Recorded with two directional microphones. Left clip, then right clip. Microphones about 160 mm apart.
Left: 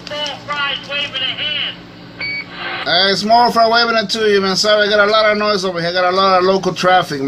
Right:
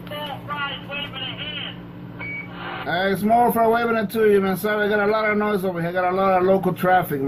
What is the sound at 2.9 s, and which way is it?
A man's voice, 25° left (ahead or behind).